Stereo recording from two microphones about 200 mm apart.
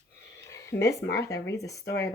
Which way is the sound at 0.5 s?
15° left (ahead or behind).